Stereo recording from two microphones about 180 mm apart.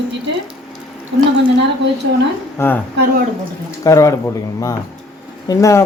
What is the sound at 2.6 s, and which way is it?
Speech, 15° left (ahead or behind).